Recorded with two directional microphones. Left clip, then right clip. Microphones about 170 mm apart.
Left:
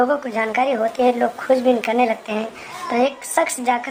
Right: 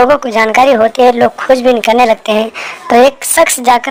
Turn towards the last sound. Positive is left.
turn(degrees=-40)  # may be behind; listen again after turning